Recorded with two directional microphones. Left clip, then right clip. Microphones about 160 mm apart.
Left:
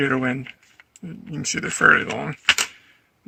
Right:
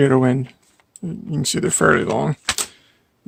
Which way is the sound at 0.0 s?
65° right (ahead or behind).